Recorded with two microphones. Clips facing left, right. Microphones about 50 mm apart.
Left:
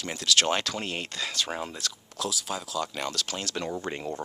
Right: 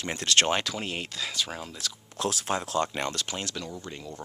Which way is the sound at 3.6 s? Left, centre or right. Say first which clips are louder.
Left 6 dB; left.